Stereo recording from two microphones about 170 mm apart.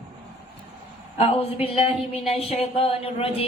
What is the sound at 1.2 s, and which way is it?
Speech, 35° left (ahead or behind).